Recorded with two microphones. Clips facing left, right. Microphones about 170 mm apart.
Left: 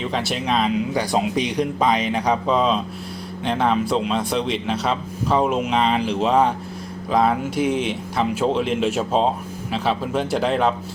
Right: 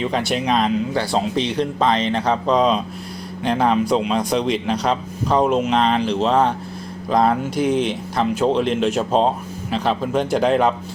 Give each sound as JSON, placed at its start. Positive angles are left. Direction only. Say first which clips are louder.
{"t": 0.0, "sound": "a man's voice", "louder": "right 3 dB", "side_deg": 0}
{"t": 0.9, "sound": "a man's voice", "louder": "right 1 dB", "side_deg": 15}